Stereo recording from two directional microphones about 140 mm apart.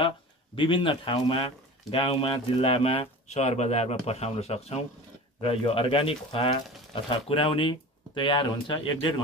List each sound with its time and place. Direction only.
0.6 s speech: 35° left (ahead or behind)